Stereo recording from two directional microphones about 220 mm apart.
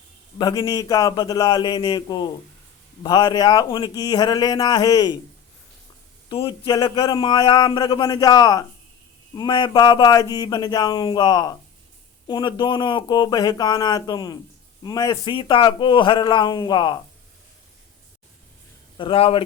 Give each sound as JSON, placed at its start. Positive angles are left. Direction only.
{"t": 0.3, "sound": "speech", "side_deg": 20}
{"t": 6.2, "sound": "a man's voice", "side_deg": 25}
{"t": 18.9, "sound": "speech", "side_deg": 25}